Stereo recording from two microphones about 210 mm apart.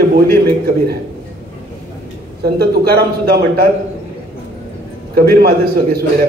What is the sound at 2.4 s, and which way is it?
A man's voice, 50° right (ahead or behind).